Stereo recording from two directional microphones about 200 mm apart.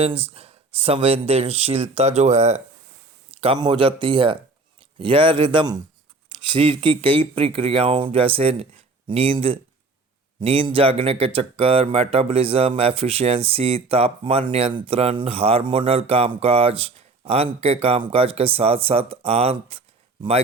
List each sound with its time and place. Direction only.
0.0 s speech: 30° right (ahead or behind)